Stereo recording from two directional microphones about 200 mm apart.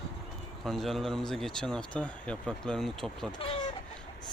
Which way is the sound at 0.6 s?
Centre (ahead or behind).